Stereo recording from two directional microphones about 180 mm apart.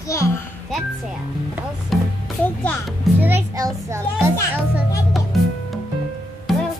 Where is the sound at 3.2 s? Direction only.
10° right (ahead or behind).